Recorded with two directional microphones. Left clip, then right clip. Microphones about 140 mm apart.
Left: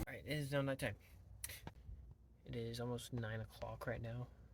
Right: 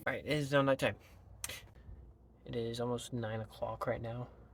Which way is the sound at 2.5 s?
20° right (ahead or behind).